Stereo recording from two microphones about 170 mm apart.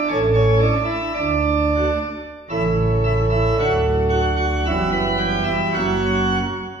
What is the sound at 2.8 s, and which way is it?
Organ, 45° right (ahead or behind).